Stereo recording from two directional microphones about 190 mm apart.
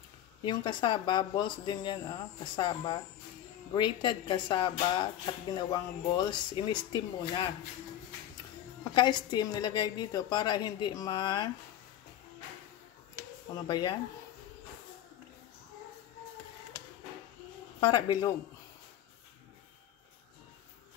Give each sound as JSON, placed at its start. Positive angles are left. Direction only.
{"t": 0.4, "sound": "a woman's voice", "side_deg": 25}
{"t": 8.9, "sound": "a woman's voice", "side_deg": 25}
{"t": 13.7, "sound": "a woman's voice", "side_deg": 20}
{"t": 17.7, "sound": "a woman's voice", "side_deg": 25}